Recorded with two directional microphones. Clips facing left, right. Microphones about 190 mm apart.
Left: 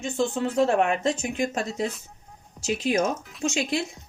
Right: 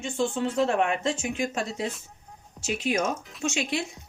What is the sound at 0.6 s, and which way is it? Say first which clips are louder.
Speech: left 3 dB; 40° left (ahead or behind).